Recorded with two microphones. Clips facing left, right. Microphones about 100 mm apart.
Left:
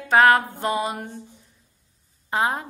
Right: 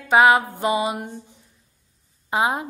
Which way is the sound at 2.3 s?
10° right (ahead or behind).